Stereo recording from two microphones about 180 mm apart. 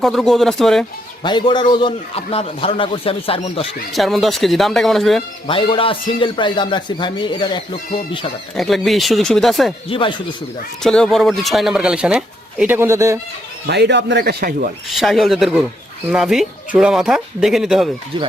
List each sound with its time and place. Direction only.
0.0 s speech: centre (ahead or behind)
1.2 s a man's voice: 25° left (ahead or behind)
3.9 s speech: centre (ahead or behind)
5.5 s a man's voice: 30° left (ahead or behind)
8.5 s speech: centre (ahead or behind)
9.9 s a man's voice: 30° left (ahead or behind)
10.8 s speech: 5° left (ahead or behind); by 13.1 s 15° right (ahead or behind)
13.7 s a man's voice: 70° right (ahead or behind)
14.8 s speech: centre (ahead or behind)